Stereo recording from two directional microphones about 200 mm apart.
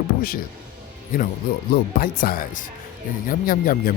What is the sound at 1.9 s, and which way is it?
Speech, 50° left (ahead or behind).